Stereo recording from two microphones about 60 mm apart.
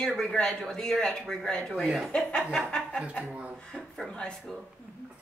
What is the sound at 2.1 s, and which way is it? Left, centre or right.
Speech, centre.